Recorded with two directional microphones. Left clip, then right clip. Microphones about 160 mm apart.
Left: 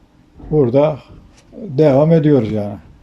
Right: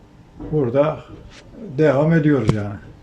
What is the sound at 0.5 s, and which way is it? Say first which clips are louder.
Speech: left 5 dB; 35° left (ahead or behind).